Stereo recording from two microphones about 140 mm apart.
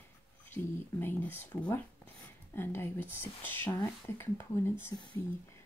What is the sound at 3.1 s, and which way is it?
Speech, 15° left (ahead or behind).